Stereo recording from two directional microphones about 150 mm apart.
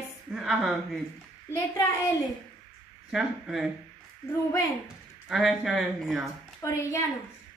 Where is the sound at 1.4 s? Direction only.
15° left (ahead or behind).